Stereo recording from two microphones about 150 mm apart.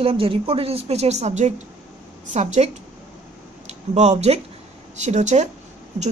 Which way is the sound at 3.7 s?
50° right (ahead or behind).